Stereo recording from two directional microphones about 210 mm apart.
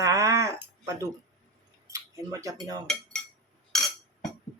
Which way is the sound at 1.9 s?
15° right (ahead or behind).